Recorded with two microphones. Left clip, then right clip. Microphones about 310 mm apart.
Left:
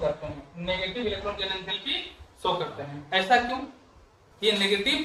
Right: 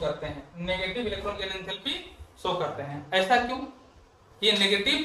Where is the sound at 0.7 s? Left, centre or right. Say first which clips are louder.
Even; centre.